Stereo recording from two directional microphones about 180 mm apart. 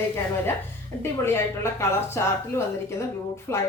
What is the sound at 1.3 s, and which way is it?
A woman's voice, 15° left (ahead or behind).